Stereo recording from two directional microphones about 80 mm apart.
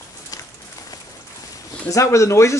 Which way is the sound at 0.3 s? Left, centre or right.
Left.